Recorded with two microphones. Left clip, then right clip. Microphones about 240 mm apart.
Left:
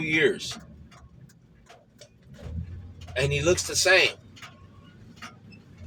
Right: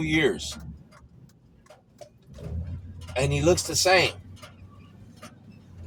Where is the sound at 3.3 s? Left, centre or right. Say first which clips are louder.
Right 2 dB; right.